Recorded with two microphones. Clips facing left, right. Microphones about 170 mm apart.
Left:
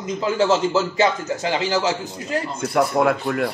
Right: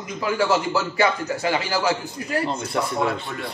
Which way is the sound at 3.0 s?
60° left (ahead or behind).